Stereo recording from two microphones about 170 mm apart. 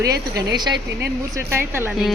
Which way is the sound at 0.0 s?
25° right (ahead or behind).